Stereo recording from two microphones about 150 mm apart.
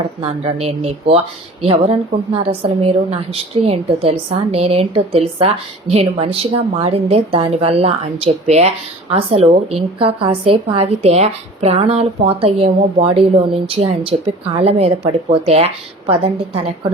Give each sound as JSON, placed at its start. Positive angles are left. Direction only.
{"t": 0.2, "sound": "a woman's voice", "side_deg": -40}